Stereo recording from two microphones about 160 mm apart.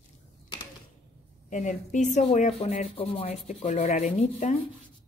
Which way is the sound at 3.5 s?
50° left (ahead or behind).